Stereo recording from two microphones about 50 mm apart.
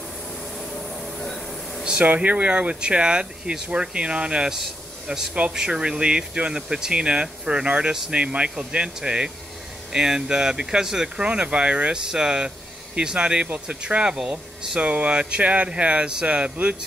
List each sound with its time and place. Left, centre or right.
0.6 s train: centre
2.1 s speech: right
11.2 s speech: right